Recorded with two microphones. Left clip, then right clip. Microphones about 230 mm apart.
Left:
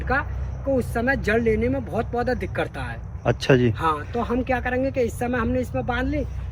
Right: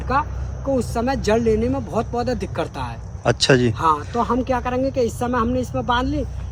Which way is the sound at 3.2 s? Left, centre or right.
Centre.